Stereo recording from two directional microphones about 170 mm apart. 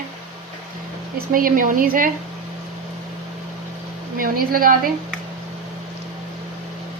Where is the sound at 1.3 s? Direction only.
55° right (ahead or behind).